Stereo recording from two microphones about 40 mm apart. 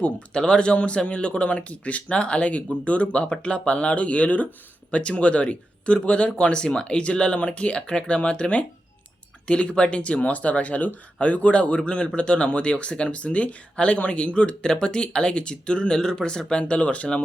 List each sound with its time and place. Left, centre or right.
0.0 s speech: left
16.6 s speech: left